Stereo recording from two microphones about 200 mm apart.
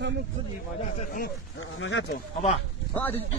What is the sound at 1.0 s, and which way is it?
Speech, 45° left (ahead or behind).